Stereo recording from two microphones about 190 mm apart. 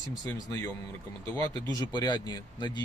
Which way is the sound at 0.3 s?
15° left (ahead or behind).